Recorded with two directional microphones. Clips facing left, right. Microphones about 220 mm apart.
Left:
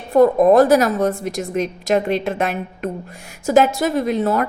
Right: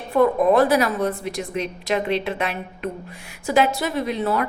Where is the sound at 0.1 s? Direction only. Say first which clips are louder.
Left 5 dB; 45° left (ahead or behind).